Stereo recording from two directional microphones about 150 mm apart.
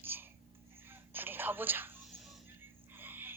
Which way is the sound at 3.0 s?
15° right (ahead or behind).